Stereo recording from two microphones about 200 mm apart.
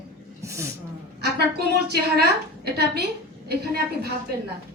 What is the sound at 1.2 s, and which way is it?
A woman's voice, 55° right (ahead or behind).